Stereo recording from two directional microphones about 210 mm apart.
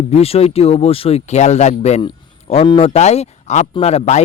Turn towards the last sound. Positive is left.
turn(degrees=30)  # may be behind; listen again after turning